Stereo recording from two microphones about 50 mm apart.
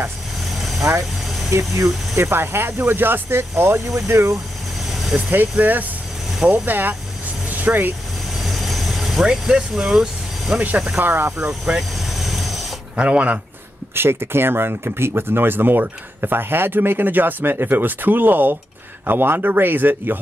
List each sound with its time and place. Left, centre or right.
0.6 s vehicle: centre
1.5 s speech: right
2.1 s speech: right
5.3 s speech: right
7.4 s vehicle: right
8.4 s vehicle: centre
9.6 s speech: centre
9.9 s vehicle: centre
11.0 s speech: right
11.4 s speech: centre
12.1 s vehicle: centre
12.9 s speech: right
13.9 s speech: right